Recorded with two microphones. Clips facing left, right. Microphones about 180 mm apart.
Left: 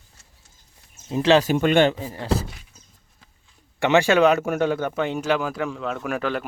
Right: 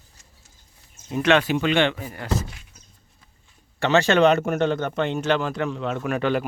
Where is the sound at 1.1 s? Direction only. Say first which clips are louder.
Left 2 dB; 30° left (ahead or behind).